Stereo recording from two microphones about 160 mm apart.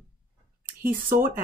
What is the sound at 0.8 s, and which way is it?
Speech, 60° right (ahead or behind).